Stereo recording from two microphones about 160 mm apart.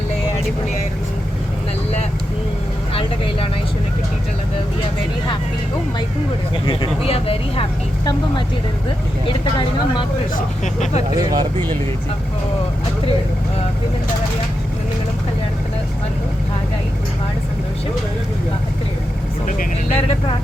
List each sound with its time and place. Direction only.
6.7 s speech: 35° left (ahead or behind)
9.2 s speech: 30° left (ahead or behind)
11.2 s speech: 25° right (ahead or behind)
19.9 s speech: 40° left (ahead or behind)